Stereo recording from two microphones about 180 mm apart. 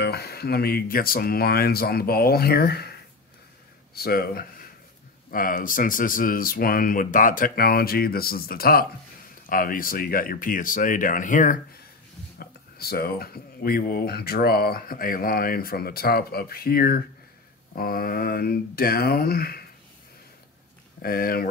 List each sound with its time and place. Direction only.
0.0 s speech: 60° left (ahead or behind); by 11.5 s 45° left (ahead or behind)
12.4 s speech: 60° left (ahead or behind)
21.0 s speech: 55° left (ahead or behind)